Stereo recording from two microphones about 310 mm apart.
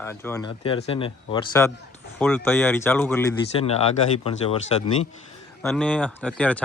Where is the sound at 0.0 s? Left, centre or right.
Centre.